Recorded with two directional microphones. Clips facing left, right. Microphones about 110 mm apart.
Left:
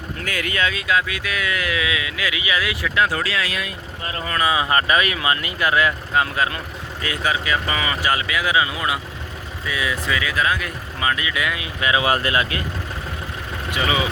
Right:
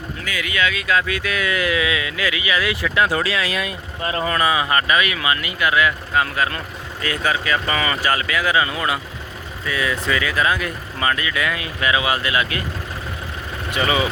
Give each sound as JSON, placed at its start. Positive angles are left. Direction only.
{"t": 0.3, "sound": "speech", "side_deg": 50}
{"t": 0.6, "sound": "speech", "side_deg": 30}
{"t": 0.9, "sound": "speech", "side_deg": 10}
{"t": 2.6, "sound": "speech", "side_deg": 5}
{"t": 3.0, "sound": "speech", "side_deg": -15}
{"t": 4.4, "sound": "speech", "side_deg": 25}
{"t": 12.0, "sound": "speech", "side_deg": 40}
{"t": 13.7, "sound": "speech", "side_deg": 10}